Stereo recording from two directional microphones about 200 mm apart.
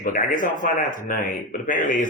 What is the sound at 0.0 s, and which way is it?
Speech, 40° left (ahead or behind).